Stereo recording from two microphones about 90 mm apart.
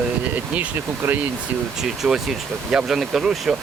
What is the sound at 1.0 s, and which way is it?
Speech, 25° right (ahead or behind).